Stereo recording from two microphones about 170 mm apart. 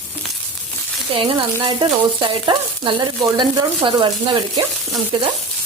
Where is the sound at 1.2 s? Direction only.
30° right (ahead or behind).